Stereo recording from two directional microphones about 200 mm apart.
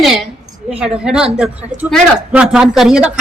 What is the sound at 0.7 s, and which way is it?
A woman's voice, 5° right (ahead or behind).